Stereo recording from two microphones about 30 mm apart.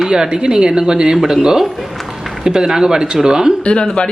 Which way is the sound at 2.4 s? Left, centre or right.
Right.